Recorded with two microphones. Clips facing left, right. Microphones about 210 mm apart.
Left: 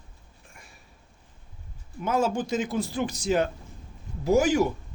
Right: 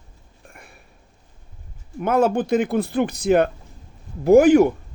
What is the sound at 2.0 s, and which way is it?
Speech, 60° right (ahead or behind).